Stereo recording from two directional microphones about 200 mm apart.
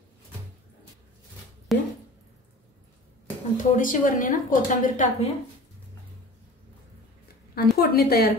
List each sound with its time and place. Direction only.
1.7 s a sound: centre (ahead or behind)
3.5 s a woman's voice: 40° left (ahead or behind)
7.5 s a woman's voice: 50° left (ahead or behind)